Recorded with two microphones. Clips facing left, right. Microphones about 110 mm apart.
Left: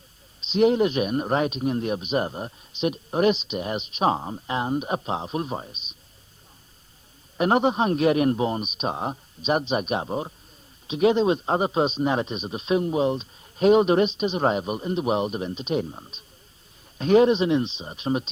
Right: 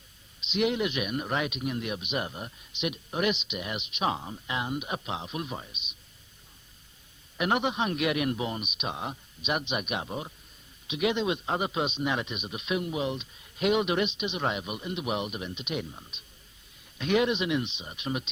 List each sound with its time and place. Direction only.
0.3 s speech: 35° left (ahead or behind)
7.3 s speech: 35° left (ahead or behind)